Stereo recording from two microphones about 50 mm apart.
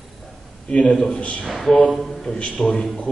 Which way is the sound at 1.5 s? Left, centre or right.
Centre.